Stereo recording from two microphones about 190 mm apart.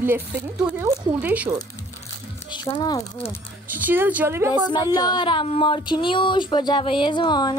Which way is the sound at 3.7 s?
10° right (ahead or behind).